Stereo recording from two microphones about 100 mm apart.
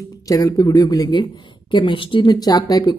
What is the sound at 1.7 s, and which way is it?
Speech, 55° left (ahead or behind).